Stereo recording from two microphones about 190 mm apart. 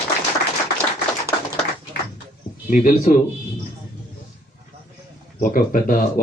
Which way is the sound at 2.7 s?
45° left (ahead or behind).